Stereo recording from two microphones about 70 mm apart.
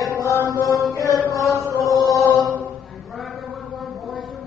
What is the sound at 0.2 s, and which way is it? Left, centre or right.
Mantra, left.